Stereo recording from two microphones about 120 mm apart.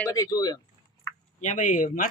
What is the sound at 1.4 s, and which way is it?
Speech, 90° left.